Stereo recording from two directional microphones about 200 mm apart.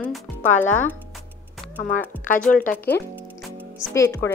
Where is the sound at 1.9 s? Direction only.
40° left (ahead or behind).